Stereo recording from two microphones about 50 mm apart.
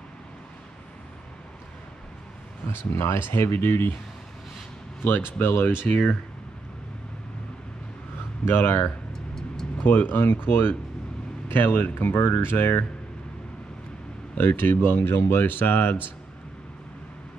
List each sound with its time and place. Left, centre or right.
2.7 s speech: left
5.4 s speech: left
5.9 s speech: left
8.5 s speech: left
9.8 s speech: left
14.3 s speech: left